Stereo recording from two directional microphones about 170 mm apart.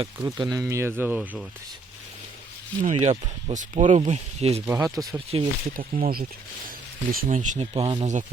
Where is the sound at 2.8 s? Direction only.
40° right (ahead or behind).